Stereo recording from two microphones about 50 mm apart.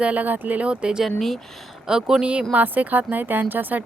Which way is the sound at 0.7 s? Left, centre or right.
Centre.